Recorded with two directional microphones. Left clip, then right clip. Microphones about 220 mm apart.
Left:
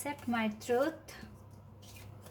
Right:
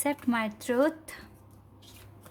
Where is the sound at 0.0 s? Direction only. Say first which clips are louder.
Right 6 dB; 50° right (ahead or behind).